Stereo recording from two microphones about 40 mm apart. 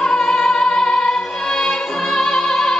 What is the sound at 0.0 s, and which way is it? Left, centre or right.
Music, centre.